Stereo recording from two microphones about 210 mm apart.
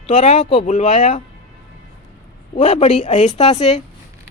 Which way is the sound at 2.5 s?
30° left (ahead or behind).